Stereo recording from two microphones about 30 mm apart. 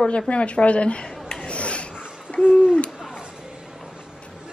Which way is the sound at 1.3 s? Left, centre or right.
Left.